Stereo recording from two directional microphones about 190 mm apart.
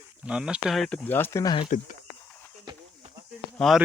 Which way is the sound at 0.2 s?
5° right (ahead or behind).